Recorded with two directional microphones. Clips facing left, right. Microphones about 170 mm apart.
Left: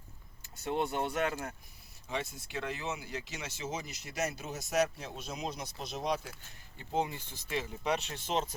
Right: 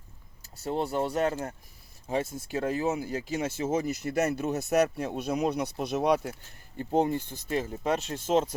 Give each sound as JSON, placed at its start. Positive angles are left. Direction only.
{"t": 0.4, "sound": "speech", "side_deg": -35}
{"t": 6.7, "sound": "speech", "side_deg": -50}